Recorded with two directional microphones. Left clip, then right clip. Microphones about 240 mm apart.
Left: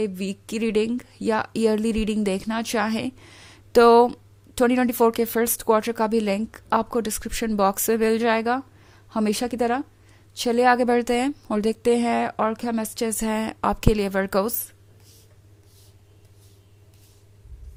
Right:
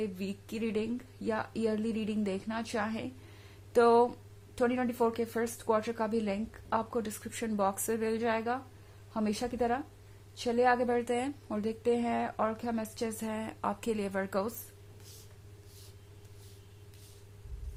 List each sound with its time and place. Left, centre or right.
0.0 s a woman's voice: left